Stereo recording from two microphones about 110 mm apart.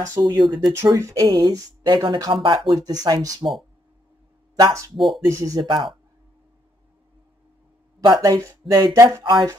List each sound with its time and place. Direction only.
0.1 s speech: 30° right (ahead or behind)
4.6 s speech: 30° right (ahead or behind)
4.9 s speech: centre (ahead or behind)
5.3 s speech: 30° right (ahead or behind)
5.6 s speech: 50° right (ahead or behind)
8.0 s speech: 40° right (ahead or behind)
9.2 s speech: 40° right (ahead or behind)